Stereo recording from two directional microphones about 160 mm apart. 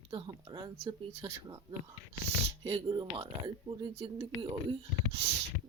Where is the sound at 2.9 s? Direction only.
25° right (ahead or behind).